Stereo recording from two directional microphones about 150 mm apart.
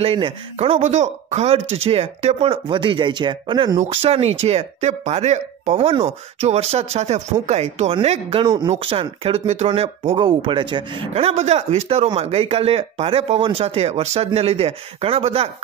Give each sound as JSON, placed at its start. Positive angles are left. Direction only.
{"t": 0.0, "sound": "speech", "side_deg": -40}
{"t": 8.5, "sound": "speech", "side_deg": -30}
{"t": 11.1, "sound": "speech", "side_deg": -45}